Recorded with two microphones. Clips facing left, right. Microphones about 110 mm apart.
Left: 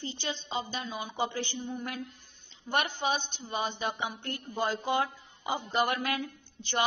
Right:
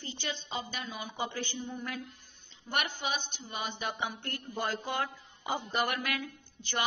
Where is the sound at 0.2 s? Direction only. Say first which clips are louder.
Left 2 dB; 20° left (ahead or behind).